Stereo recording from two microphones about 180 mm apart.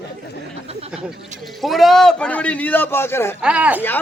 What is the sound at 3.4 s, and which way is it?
Speech, 5° right (ahead or behind).